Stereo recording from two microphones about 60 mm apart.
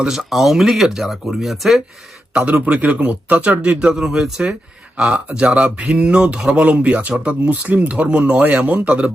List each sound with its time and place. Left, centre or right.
0.0 s speech: centre
2.3 s speech: right